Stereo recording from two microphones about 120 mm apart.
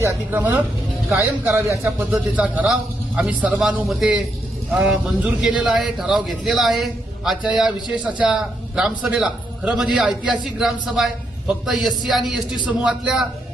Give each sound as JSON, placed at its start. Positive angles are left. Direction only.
{"t": 0.0, "sound": "a man's voice", "side_deg": -20}